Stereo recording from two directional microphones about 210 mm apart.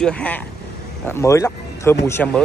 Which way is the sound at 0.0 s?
5° left (ahead or behind).